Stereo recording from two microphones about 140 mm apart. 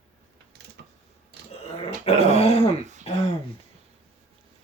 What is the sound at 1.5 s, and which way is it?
Dog, 45° left (ahead or behind).